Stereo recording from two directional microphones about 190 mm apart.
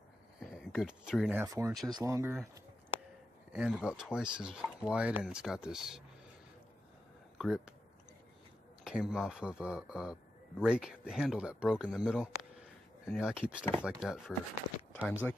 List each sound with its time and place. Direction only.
0.4 s a sound: 5° right (ahead or behind)
1.3 s speech: 15° right (ahead or behind)
3.5 s speech: 5° right (ahead or behind)
7.3 s speech: 5° right (ahead or behind)
8.8 s speech: 5° right (ahead or behind)